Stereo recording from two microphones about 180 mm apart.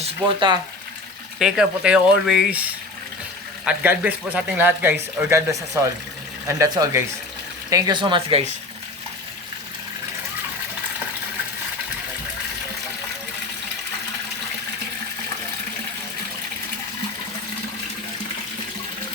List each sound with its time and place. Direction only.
0.0 s speech: 25° right (ahead or behind)
1.4 s speech: 5° right (ahead or behind)
3.7 s speech: 5° right (ahead or behind); by 8.4 s 30° right (ahead or behind)